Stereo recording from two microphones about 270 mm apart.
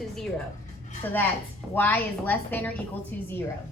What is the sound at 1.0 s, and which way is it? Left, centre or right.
A woman's voice, centre.